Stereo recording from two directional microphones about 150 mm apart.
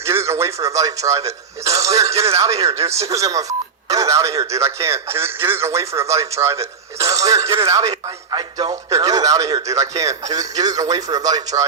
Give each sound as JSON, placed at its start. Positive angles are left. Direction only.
{"t": 0.0, "sound": "speech", "side_deg": -20}